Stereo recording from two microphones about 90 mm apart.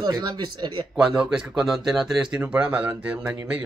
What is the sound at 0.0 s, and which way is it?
Speech, 50° right (ahead or behind).